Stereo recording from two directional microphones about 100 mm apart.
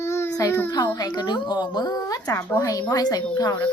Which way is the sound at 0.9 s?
45° left (ahead or behind).